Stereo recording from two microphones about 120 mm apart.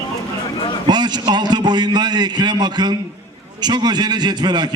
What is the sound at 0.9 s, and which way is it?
A man's voice, 35° right (ahead or behind).